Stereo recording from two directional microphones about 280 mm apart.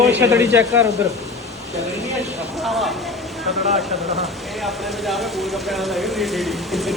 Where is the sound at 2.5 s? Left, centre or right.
Centre.